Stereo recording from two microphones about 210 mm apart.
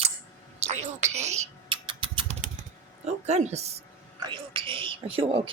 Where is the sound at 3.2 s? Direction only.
30° right (ahead or behind).